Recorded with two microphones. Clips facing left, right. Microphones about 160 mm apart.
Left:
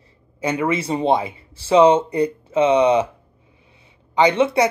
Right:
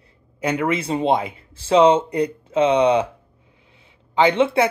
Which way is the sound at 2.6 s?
5° left (ahead or behind).